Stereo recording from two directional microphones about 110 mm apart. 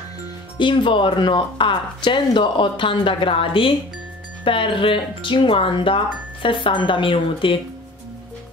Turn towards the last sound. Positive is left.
turn(degrees=50)  # may be behind; listen again after turning